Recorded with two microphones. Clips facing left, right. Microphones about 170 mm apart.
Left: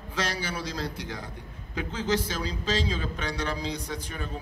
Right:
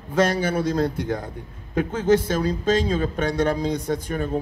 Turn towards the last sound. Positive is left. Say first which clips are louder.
# right 11 dB
turn(degrees=-50)  # may be behind; listen again after turning